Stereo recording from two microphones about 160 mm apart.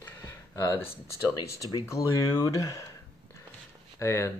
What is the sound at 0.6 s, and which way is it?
Speech, 20° left (ahead or behind).